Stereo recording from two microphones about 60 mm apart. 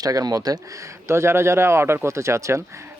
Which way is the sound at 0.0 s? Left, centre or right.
Right.